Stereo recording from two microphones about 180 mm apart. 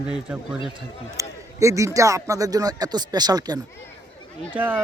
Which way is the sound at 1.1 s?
15° right (ahead or behind).